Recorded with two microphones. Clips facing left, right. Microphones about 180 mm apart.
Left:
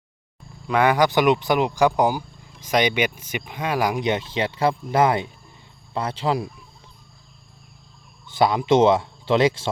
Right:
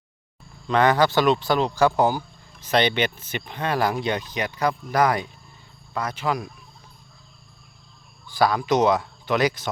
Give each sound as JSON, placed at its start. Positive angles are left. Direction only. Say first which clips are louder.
{"t": 0.7, "sound": "speech", "louder": "even", "side_deg": 10}
{"t": 8.3, "sound": "speech", "louder": "left 3 dB", "side_deg": 25}